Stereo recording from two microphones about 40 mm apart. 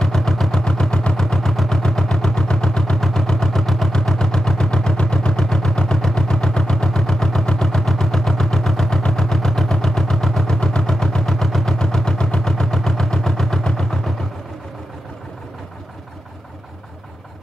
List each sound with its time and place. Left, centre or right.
0.0 s vehicle: centre
1.2 s vehicle: centre